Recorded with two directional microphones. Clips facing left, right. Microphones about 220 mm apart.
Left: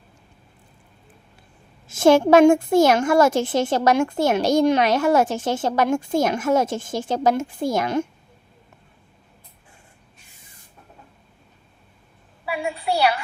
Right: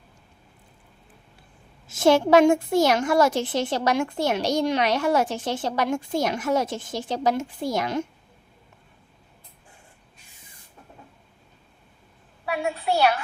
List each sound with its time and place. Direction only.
1.9 s a woman's voice: 50° left (ahead or behind)
12.5 s a woman's voice: centre (ahead or behind)